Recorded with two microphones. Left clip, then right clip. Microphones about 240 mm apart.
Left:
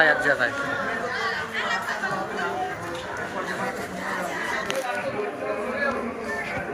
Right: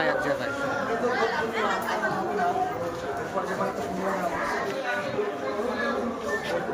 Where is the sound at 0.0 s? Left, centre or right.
Centre.